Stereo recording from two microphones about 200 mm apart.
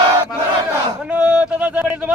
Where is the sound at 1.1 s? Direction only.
5° right (ahead or behind).